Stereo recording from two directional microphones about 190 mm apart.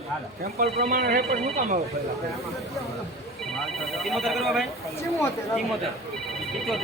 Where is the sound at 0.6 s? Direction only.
50° right (ahead or behind).